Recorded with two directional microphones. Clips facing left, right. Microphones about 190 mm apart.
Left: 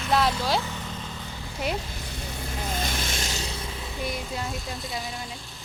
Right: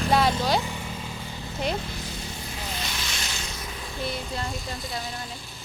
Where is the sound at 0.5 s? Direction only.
15° right (ahead or behind).